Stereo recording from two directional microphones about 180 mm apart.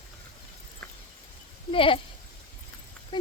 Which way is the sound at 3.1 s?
25° left (ahead or behind).